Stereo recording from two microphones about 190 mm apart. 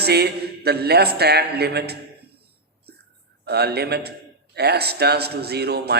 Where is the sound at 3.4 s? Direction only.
60° right (ahead or behind).